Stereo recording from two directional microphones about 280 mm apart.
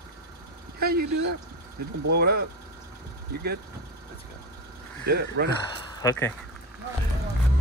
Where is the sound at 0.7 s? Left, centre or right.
Right.